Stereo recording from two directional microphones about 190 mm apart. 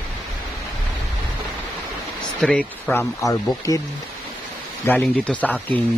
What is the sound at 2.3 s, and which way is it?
Speech, 5° left (ahead or behind).